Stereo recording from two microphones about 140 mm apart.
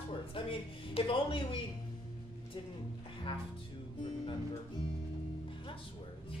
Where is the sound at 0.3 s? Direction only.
40° left (ahead or behind).